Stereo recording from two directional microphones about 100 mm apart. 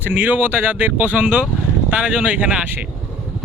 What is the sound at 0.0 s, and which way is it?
Speech, 15° right (ahead or behind).